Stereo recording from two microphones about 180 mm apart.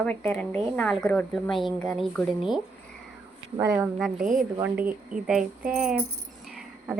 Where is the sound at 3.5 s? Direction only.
15° right (ahead or behind).